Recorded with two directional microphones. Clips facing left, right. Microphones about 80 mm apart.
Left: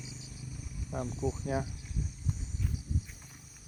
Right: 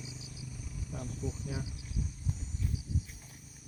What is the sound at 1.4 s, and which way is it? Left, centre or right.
Speech, left.